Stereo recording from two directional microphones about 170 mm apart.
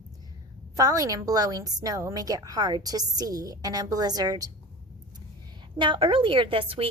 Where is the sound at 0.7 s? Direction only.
20° right (ahead or behind).